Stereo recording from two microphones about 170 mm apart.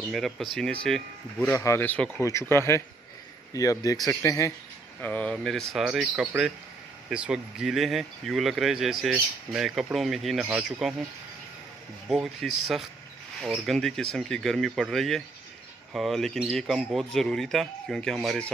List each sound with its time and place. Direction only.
0.1 s speech: centre (ahead or behind)
1.5 s speech: 15° left (ahead or behind)
5.0 s speech: 10° left (ahead or behind)
12.1 s speech: centre (ahead or behind)